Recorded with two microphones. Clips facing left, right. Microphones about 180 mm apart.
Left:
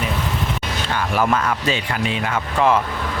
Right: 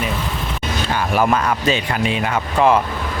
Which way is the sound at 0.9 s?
15° right (ahead or behind).